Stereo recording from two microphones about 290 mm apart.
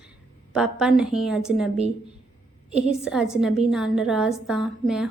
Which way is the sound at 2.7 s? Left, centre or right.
Centre.